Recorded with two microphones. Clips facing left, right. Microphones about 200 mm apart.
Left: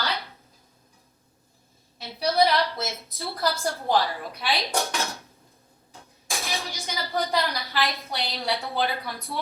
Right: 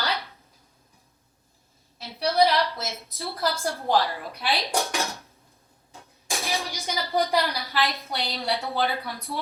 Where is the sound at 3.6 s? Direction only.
Centre (ahead or behind).